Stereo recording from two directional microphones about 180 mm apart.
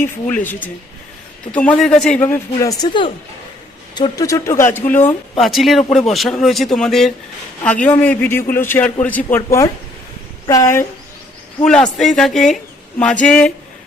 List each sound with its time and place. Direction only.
0.0 s speech: 10° left (ahead or behind)
5.4 s speech: centre (ahead or behind); by 10.8 s 15° left (ahead or behind)
11.6 s speech: 5° left (ahead or behind)